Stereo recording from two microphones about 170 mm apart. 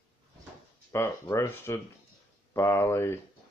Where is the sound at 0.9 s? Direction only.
15° left (ahead or behind).